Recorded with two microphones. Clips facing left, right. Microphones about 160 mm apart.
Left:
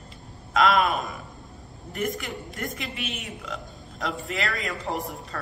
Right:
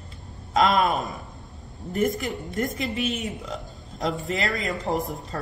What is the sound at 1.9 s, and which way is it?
A woman's voice, 40° right (ahead or behind).